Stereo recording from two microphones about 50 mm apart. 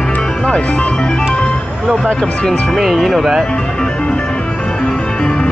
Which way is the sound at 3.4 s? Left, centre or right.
Centre.